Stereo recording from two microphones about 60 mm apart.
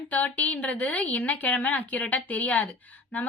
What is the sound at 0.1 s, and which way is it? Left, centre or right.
A woman's voice, left.